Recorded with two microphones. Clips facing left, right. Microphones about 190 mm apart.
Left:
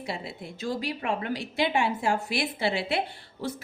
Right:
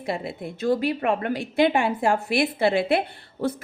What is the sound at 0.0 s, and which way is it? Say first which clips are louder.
A woman's voice: right 6 dB; 55° right (ahead or behind).